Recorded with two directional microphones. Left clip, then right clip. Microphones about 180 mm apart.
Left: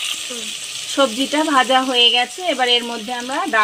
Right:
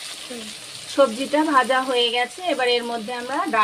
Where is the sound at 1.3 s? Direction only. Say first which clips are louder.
Left 3 dB; 30° left (ahead or behind).